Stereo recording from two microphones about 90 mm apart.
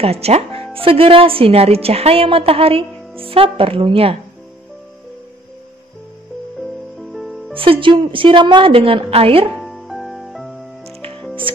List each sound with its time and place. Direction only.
0.0 s speech: 90° right
7.0 s music: centre (ahead or behind)
7.5 s a woman's voice: 80° right
9.5 s music: centre (ahead or behind)
11.5 s music: 75° right (ahead or behind)